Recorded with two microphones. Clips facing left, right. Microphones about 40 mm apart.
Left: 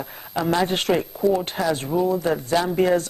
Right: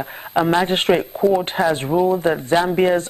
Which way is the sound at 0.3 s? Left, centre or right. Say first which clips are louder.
Right 4 dB; right.